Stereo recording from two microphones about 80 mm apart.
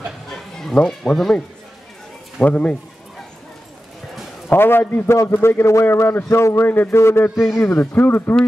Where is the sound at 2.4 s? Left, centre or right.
Centre.